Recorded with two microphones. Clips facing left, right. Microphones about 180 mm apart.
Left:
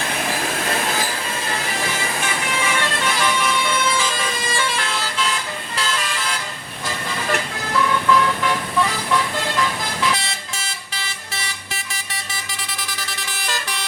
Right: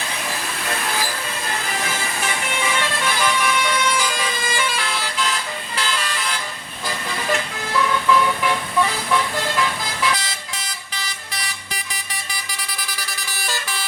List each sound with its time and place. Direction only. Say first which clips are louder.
3.4 s vehicle: even; centre (ahead or behind)
8.1 s vehicle: even; 5° right (ahead or behind)
13.0 s vehicle: left 1 dB; centre (ahead or behind)